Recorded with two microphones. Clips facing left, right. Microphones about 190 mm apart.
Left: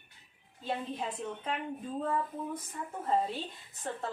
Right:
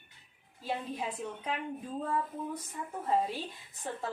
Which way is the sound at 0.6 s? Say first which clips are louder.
Even; centre (ahead or behind).